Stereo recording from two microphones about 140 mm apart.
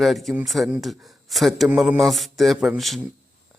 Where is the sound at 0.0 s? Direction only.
Centre (ahead or behind).